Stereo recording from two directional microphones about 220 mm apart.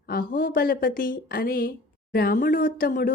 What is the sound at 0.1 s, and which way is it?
A woman's voice, 40° left (ahead or behind).